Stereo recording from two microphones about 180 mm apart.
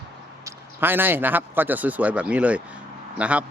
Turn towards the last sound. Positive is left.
turn(degrees=-5)  # may be behind; listen again after turning